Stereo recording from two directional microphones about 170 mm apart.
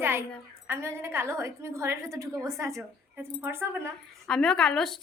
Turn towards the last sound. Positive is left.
turn(degrees=5)  # may be behind; listen again after turning